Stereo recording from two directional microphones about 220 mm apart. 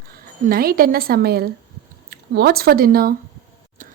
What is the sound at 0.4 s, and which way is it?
A woman's voice, 45° right (ahead or behind).